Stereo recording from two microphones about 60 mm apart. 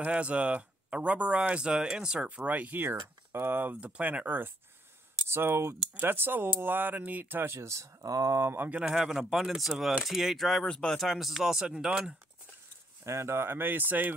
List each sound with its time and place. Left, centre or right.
0.0 s speech: right
2.2 s speech: right
5.3 s speech: right
7.5 s speech: right
8.0 s speech: right
8.4 s speech: right
8.8 s speech: centre
10.6 s speech: centre
11.0 s speech: centre
13.0 s speech: right